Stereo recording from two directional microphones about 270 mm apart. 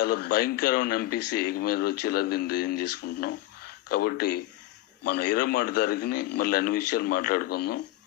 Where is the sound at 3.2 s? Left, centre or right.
Left.